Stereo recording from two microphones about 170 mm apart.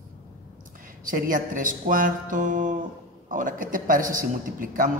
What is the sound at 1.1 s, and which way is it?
Speech, 55° right (ahead or behind).